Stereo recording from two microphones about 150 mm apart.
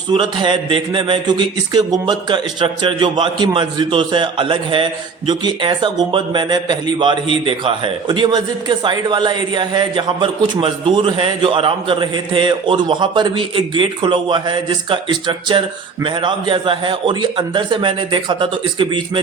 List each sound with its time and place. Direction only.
0.1 s a man's voice: 30° right (ahead or behind)